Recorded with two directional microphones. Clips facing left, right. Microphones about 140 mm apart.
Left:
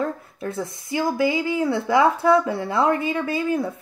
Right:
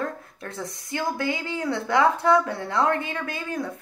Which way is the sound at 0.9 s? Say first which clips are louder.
Left 6 dB; 10° left (ahead or behind).